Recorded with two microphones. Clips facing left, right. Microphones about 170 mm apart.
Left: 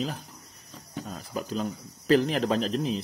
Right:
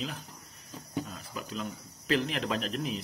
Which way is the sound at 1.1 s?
35° left (ahead or behind).